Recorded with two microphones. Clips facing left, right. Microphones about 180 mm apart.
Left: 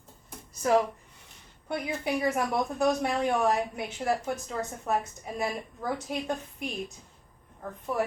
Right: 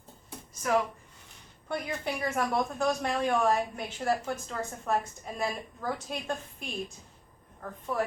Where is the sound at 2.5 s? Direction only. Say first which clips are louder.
Left 2 dB; 15° left (ahead or behind).